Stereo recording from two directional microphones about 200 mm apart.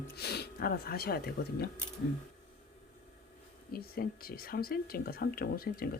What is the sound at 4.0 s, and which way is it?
Speech, 45° left (ahead or behind).